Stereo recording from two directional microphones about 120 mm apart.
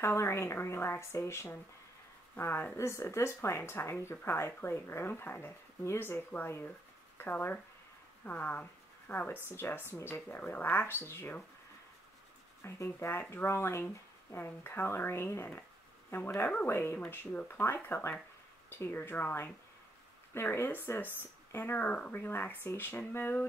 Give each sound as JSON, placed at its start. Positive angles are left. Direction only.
{"t": 0.0, "sound": "speech", "side_deg": 25}
{"t": 12.6, "sound": "speech", "side_deg": 25}